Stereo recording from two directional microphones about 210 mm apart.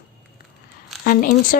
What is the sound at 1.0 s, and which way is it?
Speech, 40° left (ahead or behind).